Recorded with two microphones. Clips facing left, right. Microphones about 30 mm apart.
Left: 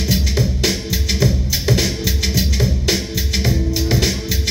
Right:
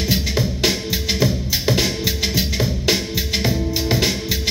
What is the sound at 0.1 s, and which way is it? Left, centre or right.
Music, centre.